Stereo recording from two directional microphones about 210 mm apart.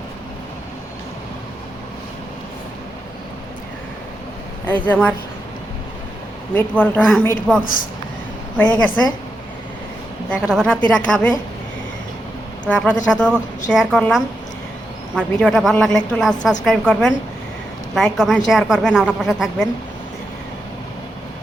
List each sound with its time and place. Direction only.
4.6 s speech: 5° left (ahead or behind)
6.5 s a man's voice: 10° left (ahead or behind)
7.6 s speech: 40° left (ahead or behind)
8.5 s a man's voice: 5° left (ahead or behind)
10.4 s a woman's voice: 5° left (ahead or behind)
12.6 s a woman's voice: 5° left (ahead or behind)